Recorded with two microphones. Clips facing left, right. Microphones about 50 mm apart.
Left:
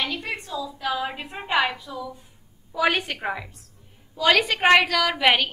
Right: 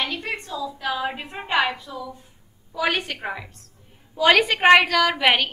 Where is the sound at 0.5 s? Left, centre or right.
Centre.